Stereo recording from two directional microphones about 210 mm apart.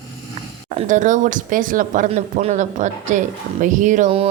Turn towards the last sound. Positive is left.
turn(degrees=-30)  # may be behind; listen again after turning